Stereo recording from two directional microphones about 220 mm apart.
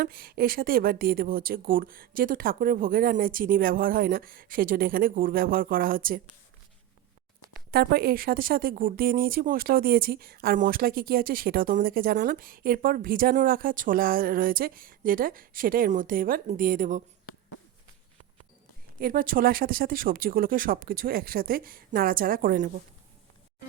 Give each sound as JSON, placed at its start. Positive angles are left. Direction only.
{"t": 0.0, "sound": "speech", "side_deg": -40}
{"t": 7.7, "sound": "speech", "side_deg": -45}
{"t": 18.9, "sound": "speech", "side_deg": -40}